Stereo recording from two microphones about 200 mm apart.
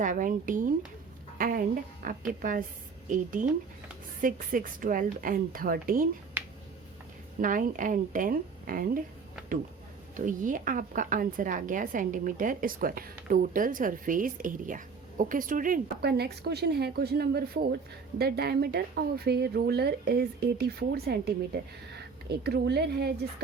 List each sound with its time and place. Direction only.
0.0 s a woman's voice: 40° right (ahead or behind)
4.2 s a woman's voice: 45° right (ahead or behind)
6.4 s finger snapping: 10° right (ahead or behind)
7.4 s speech: 40° right (ahead or behind)
10.2 s a woman's voice: 40° right (ahead or behind)